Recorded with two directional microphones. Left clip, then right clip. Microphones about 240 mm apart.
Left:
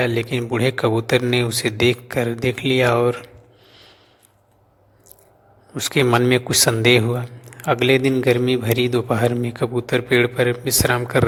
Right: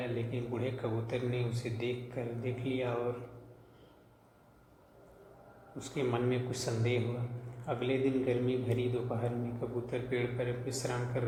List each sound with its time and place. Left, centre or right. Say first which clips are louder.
0.0 s a man's voice: left 17 dB; left
5.7 s a man's voice: left 17 dB; left